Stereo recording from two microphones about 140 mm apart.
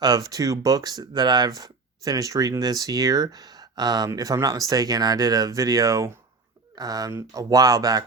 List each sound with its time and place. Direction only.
0.0 s speech: 25° right (ahead or behind)